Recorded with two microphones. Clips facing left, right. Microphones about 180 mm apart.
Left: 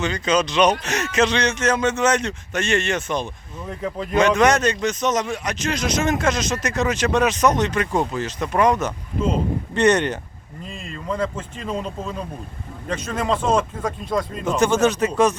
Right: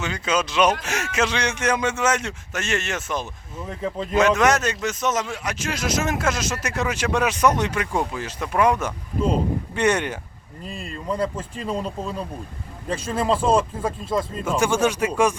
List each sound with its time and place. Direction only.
0.0 s a man's voice: 5° right (ahead or behind)
10.6 s speech: 35° right (ahead or behind)
12.9 s speech: 30° right (ahead or behind)
14.0 s speech: 5° right (ahead or behind)